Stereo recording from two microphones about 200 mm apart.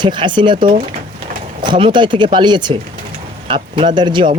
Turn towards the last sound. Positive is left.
turn(degrees=-25)  # may be behind; listen again after turning